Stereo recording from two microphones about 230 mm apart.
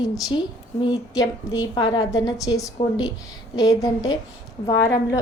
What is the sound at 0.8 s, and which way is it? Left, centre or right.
A woman's voice, centre.